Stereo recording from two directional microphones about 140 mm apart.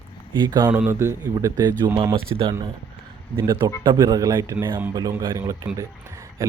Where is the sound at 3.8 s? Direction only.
25° right (ahead or behind).